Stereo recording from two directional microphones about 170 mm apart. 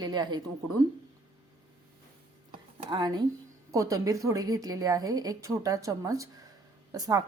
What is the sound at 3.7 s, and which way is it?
A woman's voice, 20° right (ahead or behind).